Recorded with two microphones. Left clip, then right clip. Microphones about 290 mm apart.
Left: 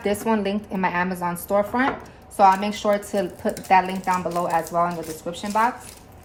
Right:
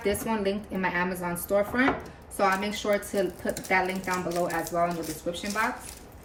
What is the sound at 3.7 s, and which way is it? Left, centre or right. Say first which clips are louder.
A woman's voice: left 8 dB; centre.